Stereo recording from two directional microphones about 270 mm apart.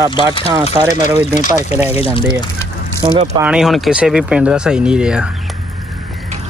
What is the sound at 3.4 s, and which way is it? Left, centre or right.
Speech, centre.